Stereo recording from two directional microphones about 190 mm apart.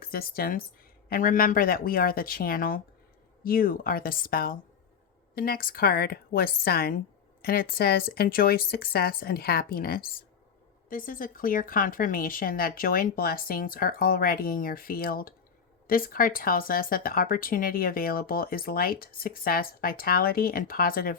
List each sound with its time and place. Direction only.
0.0 s speech: 50° left (ahead or behind)